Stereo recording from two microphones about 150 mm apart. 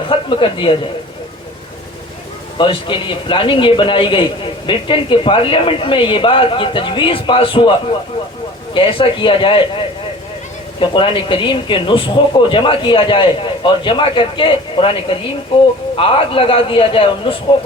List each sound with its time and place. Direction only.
0.1 s speech: 35° left (ahead or behind)
2.6 s a man's voice: 35° left (ahead or behind)
8.7 s a man's voice: 35° left (ahead or behind)
10.8 s a man's voice: 35° left (ahead or behind)